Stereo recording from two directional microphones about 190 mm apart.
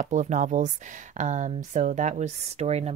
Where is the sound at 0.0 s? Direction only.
40° right (ahead or behind).